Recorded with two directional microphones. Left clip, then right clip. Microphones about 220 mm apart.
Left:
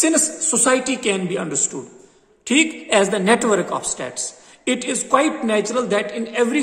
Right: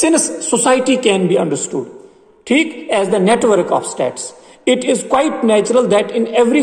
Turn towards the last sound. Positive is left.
turn(degrees=15)  # may be behind; listen again after turning